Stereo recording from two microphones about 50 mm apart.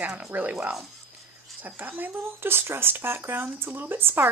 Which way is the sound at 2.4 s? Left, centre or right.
Right.